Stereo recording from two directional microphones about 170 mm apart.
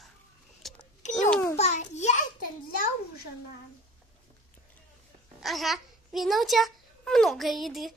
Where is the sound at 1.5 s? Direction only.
40° left (ahead or behind).